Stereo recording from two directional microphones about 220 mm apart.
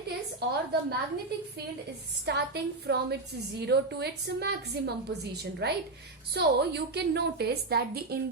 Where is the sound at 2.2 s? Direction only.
50° right (ahead or behind).